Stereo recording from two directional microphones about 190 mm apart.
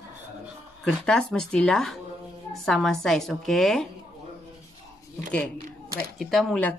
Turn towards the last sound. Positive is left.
turn(degrees=5)  # may be behind; listen again after turning